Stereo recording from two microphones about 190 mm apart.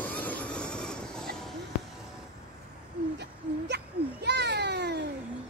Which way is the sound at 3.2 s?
65° right (ahead or behind).